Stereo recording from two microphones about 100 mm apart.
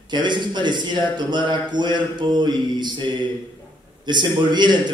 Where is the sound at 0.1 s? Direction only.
50° right (ahead or behind).